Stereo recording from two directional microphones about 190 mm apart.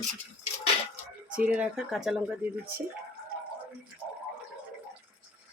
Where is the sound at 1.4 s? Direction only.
5° right (ahead or behind).